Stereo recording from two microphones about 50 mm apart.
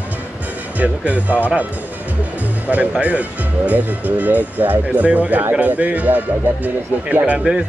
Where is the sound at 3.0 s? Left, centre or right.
Right.